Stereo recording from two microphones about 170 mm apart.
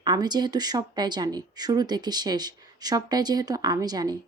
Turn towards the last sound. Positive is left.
turn(degrees=-25)  # may be behind; listen again after turning